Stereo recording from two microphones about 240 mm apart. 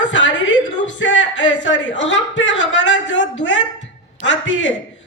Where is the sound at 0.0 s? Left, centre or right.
Left.